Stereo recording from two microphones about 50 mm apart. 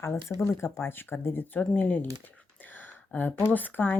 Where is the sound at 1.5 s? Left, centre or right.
Left.